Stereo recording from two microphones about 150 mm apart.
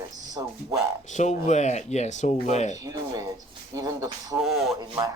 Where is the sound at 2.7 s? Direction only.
25° right (ahead or behind).